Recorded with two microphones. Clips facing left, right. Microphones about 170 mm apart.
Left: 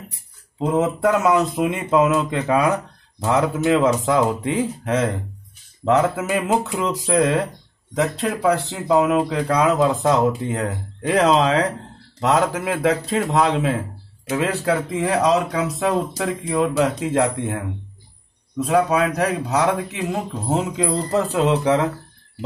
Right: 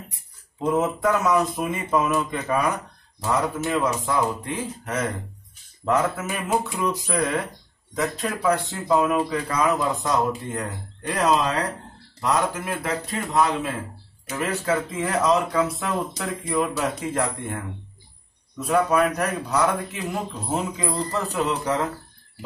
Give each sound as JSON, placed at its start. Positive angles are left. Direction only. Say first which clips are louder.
{"t": 0.6, "sound": "speech", "louder": "left 3 dB", "side_deg": 90}
{"t": 3.3, "sound": "a man's voice", "louder": "left 6 dB", "side_deg": 90}
{"t": 14.2, "sound": "a man's voice", "louder": "left 5 dB", "side_deg": 70}
{"t": 18.7, "sound": "a man's voice", "louder": "left 2 dB", "side_deg": 75}